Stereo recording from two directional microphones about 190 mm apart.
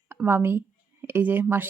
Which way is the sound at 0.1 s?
10° right (ahead or behind).